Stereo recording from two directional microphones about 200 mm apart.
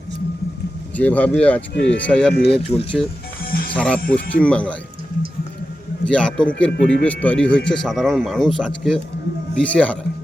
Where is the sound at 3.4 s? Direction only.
50° left (ahead or behind).